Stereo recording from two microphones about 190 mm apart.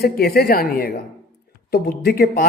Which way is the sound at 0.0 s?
55° left (ahead or behind).